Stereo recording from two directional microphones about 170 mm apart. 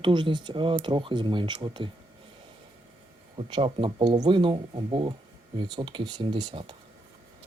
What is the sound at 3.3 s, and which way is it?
Speech, 30° right (ahead or behind).